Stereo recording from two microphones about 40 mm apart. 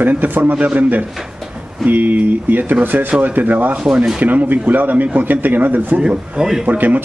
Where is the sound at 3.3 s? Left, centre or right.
Right.